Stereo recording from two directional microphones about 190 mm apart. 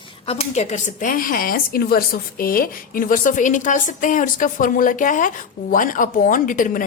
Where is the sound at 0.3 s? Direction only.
35° left (ahead or behind).